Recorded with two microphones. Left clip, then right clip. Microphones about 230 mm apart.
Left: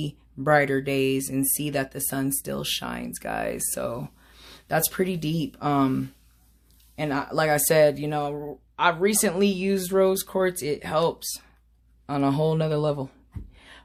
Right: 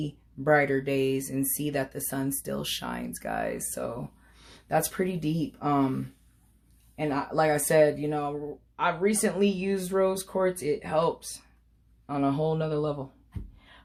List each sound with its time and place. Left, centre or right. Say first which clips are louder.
0.0 s speech: left 2 dB; left
13.6 s beatboxing: left 6 dB; left